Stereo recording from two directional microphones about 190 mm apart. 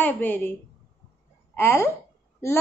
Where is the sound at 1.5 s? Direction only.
10° left (ahead or behind).